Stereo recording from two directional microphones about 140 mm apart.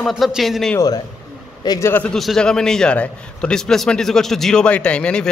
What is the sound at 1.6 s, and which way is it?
Speech, 25° left (ahead or behind).